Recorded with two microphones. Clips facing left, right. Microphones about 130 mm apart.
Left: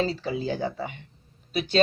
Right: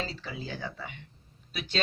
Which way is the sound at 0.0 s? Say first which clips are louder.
Left 10 dB; 35° left (ahead or behind).